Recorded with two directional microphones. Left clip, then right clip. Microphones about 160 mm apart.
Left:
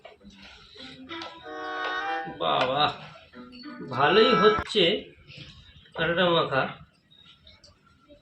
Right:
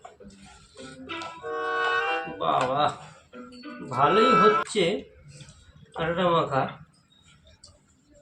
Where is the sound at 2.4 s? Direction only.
10° right (ahead or behind).